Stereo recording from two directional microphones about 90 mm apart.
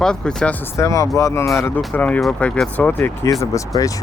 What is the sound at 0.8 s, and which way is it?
Speech, 35° left (ahead or behind).